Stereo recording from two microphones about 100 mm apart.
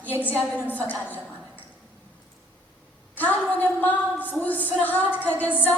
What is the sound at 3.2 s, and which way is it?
A woman's voice, 15° left (ahead or behind).